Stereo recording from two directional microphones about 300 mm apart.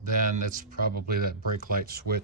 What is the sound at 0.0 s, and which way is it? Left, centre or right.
Speech, right.